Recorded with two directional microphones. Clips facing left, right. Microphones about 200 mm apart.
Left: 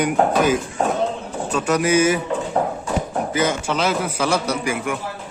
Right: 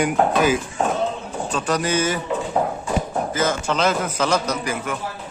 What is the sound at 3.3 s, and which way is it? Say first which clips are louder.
A man's voice: left 1 dB; 10° left (ahead or behind).